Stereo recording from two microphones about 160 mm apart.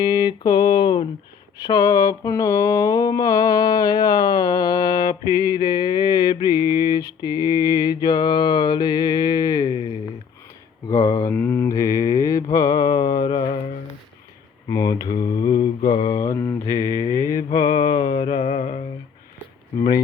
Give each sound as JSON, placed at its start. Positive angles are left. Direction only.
{"t": 0.0, "sound": "a sound", "side_deg": 25}
{"t": 1.5, "sound": "mantra", "side_deg": 20}
{"t": 10.8, "sound": "mantra", "side_deg": 25}
{"t": 14.7, "sound": "mantra", "side_deg": 20}
{"t": 16.1, "sound": "mantra", "side_deg": 20}